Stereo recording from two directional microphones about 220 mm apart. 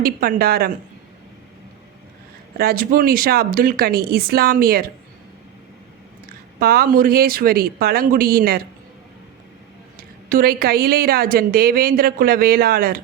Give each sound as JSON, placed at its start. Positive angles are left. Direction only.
{"t": 0.0, "sound": "a woman's voice", "side_deg": -40}
{"t": 2.6, "sound": "a woman's voice", "side_deg": -40}
{"t": 6.6, "sound": "a woman's voice", "side_deg": -40}
{"t": 10.0, "sound": "a woman's voice", "side_deg": -40}